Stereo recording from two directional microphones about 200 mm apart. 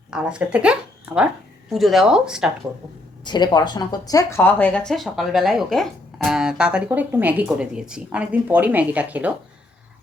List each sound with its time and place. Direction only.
0.1 s speech: 5° right (ahead or behind)
3.2 s speech: 20° left (ahead or behind); by 9.3 s 5° right (ahead or behind)